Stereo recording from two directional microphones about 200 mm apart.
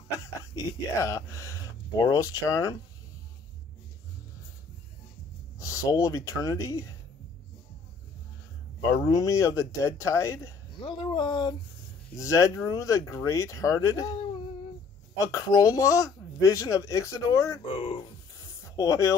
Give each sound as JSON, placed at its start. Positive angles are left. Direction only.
{"t": 0.9, "sound": "speech", "side_deg": 15}
{"t": 5.6, "sound": "speech", "side_deg": 15}
{"t": 9.0, "sound": "speech", "side_deg": 15}
{"t": 15.1, "sound": "speech", "side_deg": 15}
{"t": 17.7, "sound": "speech", "side_deg": 30}
{"t": 18.4, "sound": "a sound", "side_deg": 15}